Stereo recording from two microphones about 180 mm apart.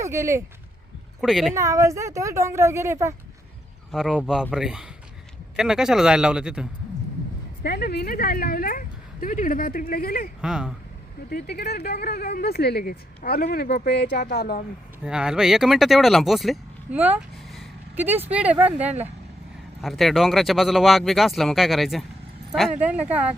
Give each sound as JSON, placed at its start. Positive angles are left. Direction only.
{"t": 0.0, "sound": "speech", "side_deg": -15}
{"t": 1.2, "sound": "speech", "side_deg": 0}
{"t": 1.5, "sound": "speech", "side_deg": -15}
{"t": 3.9, "sound": "speech", "side_deg": 0}
{"t": 7.6, "sound": "speech", "side_deg": 60}
{"t": 10.4, "sound": "speech", "side_deg": -5}
{"t": 11.3, "sound": "speech", "side_deg": 60}
{"t": 15.0, "sound": "speech", "side_deg": -5}